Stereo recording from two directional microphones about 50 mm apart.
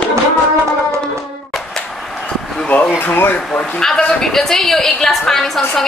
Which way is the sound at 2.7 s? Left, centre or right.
Left.